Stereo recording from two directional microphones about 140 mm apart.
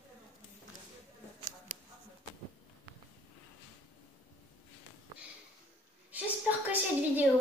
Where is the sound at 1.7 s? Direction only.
80° left.